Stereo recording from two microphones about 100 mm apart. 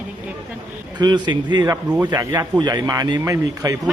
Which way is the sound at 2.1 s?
35° right (ahead or behind).